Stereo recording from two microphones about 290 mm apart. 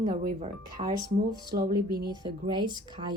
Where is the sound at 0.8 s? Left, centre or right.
Right.